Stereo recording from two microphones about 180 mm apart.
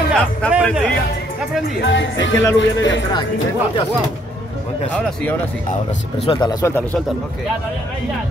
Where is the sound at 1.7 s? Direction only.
85° left.